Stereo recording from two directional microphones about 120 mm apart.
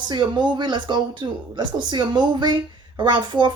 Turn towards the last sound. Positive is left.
turn(degrees=-40)  # may be behind; listen again after turning